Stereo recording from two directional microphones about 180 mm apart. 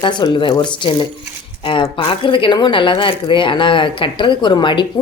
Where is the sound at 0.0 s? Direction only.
25° left (ahead or behind).